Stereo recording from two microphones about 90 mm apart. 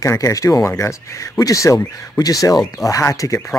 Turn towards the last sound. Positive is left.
turn(degrees=35)  # may be behind; listen again after turning